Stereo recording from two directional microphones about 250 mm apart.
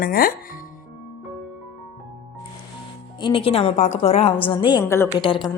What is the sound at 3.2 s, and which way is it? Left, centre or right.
A woman's voice, left.